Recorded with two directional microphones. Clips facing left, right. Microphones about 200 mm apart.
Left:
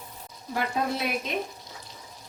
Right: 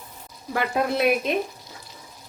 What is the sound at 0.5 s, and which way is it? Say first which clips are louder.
Speech: right 5 dB; 70° right (ahead or behind).